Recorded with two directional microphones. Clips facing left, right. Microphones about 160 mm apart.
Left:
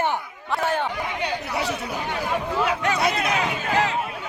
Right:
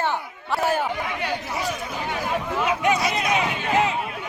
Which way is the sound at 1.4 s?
70° left (ahead or behind).